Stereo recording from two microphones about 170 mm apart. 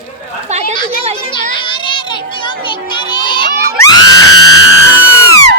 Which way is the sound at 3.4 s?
65° right (ahead or behind).